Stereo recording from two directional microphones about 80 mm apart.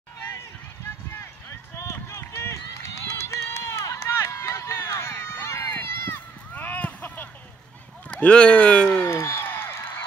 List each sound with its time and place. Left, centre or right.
1.1 s run: left
6.5 s a sound: left
8.1 s speech: centre
9.0 s music: left